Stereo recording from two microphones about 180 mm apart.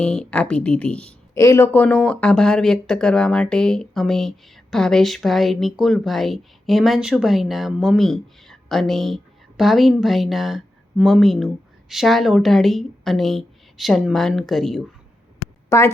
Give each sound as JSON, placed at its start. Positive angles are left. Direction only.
{"t": 0.0, "sound": "speech", "side_deg": 5}
{"t": 1.4, "sound": "speech", "side_deg": 15}
{"t": 15.7, "sound": "speech", "side_deg": 15}